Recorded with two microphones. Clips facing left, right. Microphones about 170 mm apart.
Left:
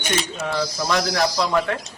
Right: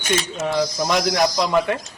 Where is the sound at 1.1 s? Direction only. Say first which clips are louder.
Right 2 dB; 15° right (ahead or behind).